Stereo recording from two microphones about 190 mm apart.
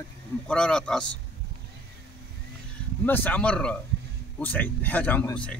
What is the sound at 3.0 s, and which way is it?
Speech, 10° left (ahead or behind).